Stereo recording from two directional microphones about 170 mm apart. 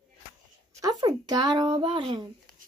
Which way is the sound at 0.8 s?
25° right (ahead or behind).